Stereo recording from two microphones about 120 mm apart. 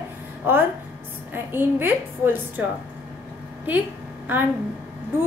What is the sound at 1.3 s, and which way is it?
A woman's voice, 20° right (ahead or behind).